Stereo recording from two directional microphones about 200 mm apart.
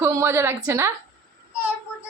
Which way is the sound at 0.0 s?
15° right (ahead or behind).